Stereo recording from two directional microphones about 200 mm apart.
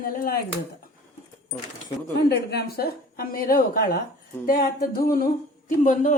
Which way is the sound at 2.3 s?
55° left (ahead or behind).